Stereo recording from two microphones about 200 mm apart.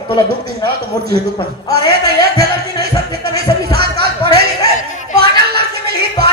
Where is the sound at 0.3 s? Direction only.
50° right (ahead or behind).